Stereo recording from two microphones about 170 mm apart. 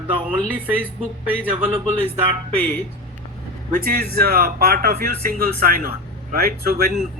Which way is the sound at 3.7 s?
60° right (ahead or behind).